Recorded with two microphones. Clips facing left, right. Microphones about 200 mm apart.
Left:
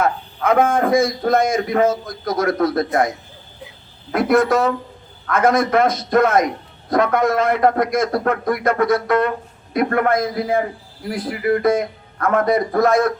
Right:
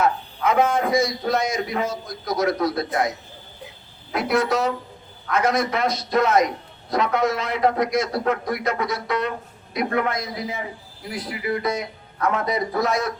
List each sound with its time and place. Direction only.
0.0 s a man's voice: 55° left (ahead or behind)
4.1 s a man's voice: 50° left (ahead or behind)